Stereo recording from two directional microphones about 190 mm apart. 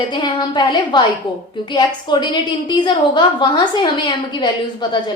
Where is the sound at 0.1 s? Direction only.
25° left (ahead or behind).